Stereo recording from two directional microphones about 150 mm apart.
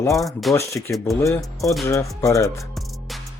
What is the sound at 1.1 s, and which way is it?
Speech, 15° left (ahead or behind).